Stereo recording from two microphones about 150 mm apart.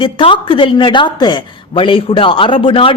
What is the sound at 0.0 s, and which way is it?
A woman's voice, 35° left (ahead or behind).